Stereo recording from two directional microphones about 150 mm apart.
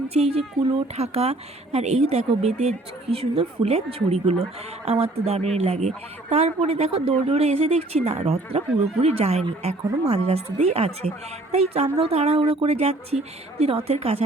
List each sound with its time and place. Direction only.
0.1 s speech: 40° right (ahead or behind)